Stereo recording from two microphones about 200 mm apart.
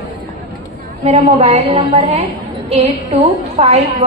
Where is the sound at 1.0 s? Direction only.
30° right (ahead or behind).